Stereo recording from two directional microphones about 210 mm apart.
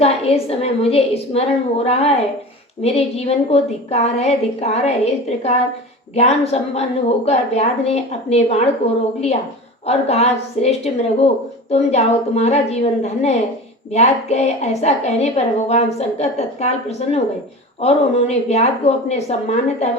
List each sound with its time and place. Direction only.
0.0 s a woman's voice: 30° left (ahead or behind)